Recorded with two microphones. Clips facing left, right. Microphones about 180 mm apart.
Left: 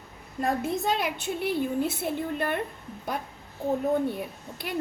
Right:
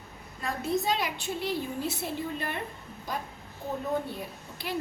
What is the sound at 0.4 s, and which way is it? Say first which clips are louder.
A woman's voice: left 2 dB; 55° left (ahead or behind).